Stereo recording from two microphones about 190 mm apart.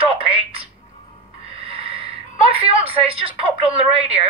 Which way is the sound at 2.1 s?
30° right (ahead or behind).